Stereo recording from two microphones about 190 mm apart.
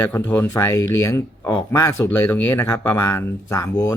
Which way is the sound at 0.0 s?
10° left (ahead or behind).